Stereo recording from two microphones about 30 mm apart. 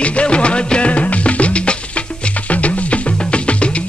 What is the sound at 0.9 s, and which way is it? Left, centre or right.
Music, left.